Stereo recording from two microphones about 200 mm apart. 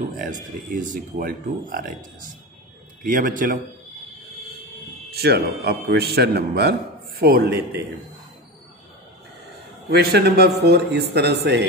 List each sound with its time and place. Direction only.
0.7 s speech: 40° right (ahead or behind)
3.0 s a man's voice: 45° right (ahead or behind)
5.1 s a man's voice: 50° right (ahead or behind)
9.8 s speech: 50° right (ahead or behind)